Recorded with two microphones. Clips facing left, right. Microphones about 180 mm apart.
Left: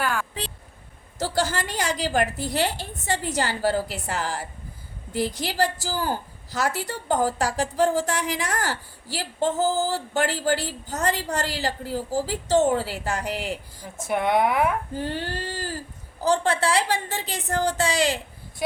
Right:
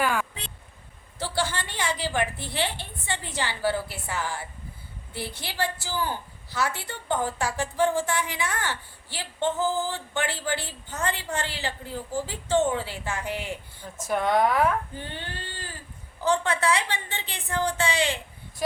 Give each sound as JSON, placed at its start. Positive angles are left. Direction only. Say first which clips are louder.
{"t": 0.0, "sound": "a sound", "louder": "right 1 dB", "side_deg": -5}
{"t": 1.2, "sound": "a woman's voice", "louder": "left 4 dB", "side_deg": 40}
{"t": 5.5, "sound": "a woman's voice", "louder": "left 5 dB", "side_deg": 40}
{"t": 13.8, "sound": "speech", "louder": "left 1 dB", "side_deg": 15}
{"t": 14.9, "sound": "a woman's voice", "louder": "left 8 dB", "side_deg": 40}